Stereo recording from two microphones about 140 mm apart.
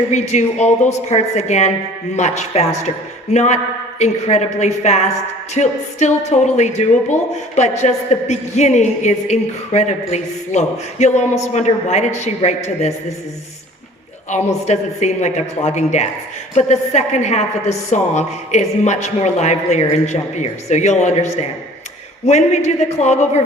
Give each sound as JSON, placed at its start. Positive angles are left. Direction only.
{"t": 0.1, "sound": "a woman's voice", "side_deg": 55}
{"t": 14.3, "sound": "a woman's voice", "side_deg": 55}